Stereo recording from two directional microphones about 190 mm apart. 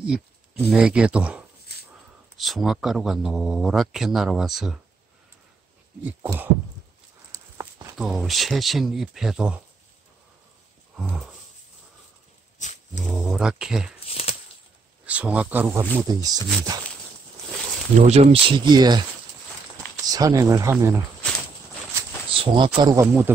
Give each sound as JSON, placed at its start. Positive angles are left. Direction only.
{"t": 0.0, "sound": "a man's voice", "side_deg": -5}
{"t": 6.0, "sound": "speech", "side_deg": -10}
{"t": 7.3, "sound": "a sound", "side_deg": -15}
{"t": 8.0, "sound": "a man's voice", "side_deg": 0}
{"t": 11.0, "sound": "a man's voice", "side_deg": 0}
{"t": 12.5, "sound": "dog", "side_deg": 40}
{"t": 13.0, "sound": "a man's voice", "side_deg": 0}
{"t": 13.9, "sound": "a sound", "side_deg": 30}
{"t": 15.0, "sound": "speech", "side_deg": -5}
{"t": 18.0, "sound": "speech", "side_deg": -35}
{"t": 20.1, "sound": "speech", "side_deg": -20}
{"t": 22.3, "sound": "speech", "side_deg": -25}